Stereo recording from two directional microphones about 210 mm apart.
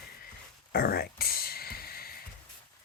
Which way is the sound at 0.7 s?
45° left (ahead or behind).